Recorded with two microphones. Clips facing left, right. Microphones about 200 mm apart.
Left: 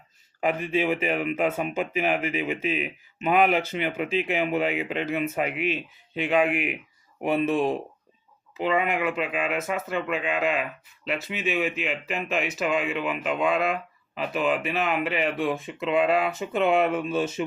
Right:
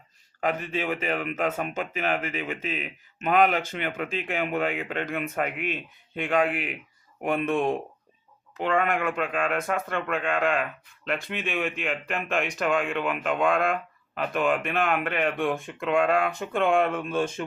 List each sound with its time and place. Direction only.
0.4 s speech: 10° left (ahead or behind)
5.5 s speech: 50° right (ahead or behind)
6.2 s speech: 10° left (ahead or behind)
8.5 s speech: 5° left (ahead or behind)